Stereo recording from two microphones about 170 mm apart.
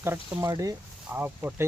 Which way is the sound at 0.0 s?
15° right (ahead or behind).